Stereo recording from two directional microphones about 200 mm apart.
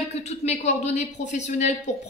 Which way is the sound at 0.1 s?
35° left (ahead or behind).